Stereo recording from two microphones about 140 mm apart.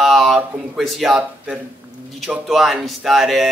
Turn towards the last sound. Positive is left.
turn(degrees=0)  # may be behind; listen again after turning